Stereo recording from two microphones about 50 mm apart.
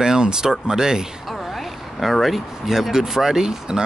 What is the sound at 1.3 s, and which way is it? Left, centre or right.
Speech, centre.